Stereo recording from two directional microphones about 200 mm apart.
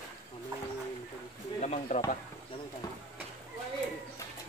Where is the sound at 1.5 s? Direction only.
35° left (ahead or behind).